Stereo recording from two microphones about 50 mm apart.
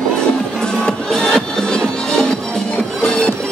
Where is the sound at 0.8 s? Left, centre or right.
Centre.